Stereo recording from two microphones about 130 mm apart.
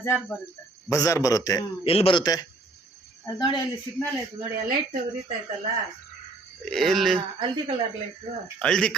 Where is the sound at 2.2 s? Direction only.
30° left (ahead or behind).